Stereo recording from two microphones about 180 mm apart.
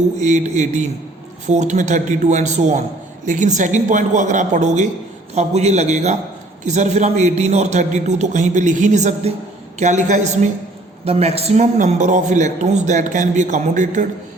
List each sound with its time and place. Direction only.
0.2 s a man's voice: 40° right (ahead or behind)